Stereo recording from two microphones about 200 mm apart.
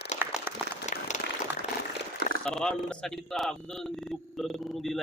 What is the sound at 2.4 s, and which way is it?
A man's voice, 5° left (ahead or behind).